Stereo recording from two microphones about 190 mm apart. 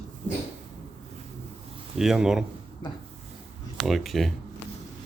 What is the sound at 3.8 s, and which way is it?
Speech, centre (ahead or behind).